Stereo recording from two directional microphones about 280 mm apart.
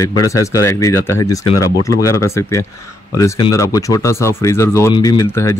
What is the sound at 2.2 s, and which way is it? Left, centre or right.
Speech, centre.